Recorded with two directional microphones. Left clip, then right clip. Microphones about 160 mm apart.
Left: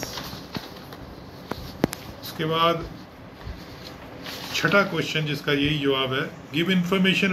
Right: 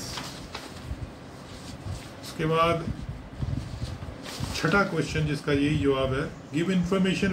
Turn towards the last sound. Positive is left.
turn(degrees=-10)  # may be behind; listen again after turning